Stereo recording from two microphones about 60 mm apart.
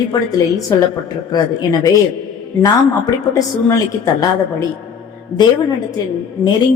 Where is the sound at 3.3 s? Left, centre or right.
Left.